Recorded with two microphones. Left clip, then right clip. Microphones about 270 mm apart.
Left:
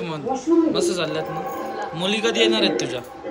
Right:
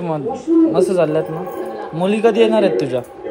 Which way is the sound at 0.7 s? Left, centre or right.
Centre.